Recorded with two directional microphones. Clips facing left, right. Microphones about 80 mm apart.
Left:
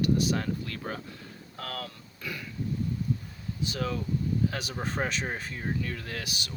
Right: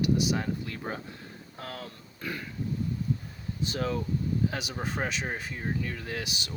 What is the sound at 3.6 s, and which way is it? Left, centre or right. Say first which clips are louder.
Speech: right 2 dB; right.